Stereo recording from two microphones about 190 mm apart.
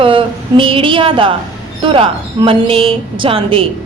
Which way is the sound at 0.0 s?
25° right (ahead or behind).